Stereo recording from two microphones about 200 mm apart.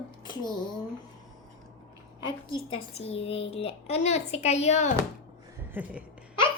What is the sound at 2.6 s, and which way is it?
Speech, 30° left (ahead or behind).